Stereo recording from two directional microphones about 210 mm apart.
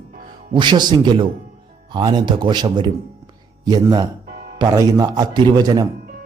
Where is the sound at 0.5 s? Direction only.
20° right (ahead or behind).